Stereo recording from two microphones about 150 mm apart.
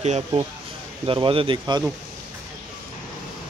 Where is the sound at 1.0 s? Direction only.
35° right (ahead or behind).